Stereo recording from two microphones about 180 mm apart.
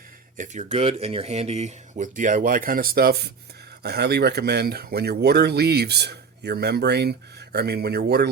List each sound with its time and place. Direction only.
0.3 s speech: 40° right (ahead or behind); by 8.3 s 65° right (ahead or behind)